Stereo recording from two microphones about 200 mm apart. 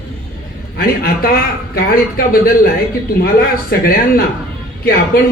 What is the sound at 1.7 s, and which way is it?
Speech, 50° left (ahead or behind).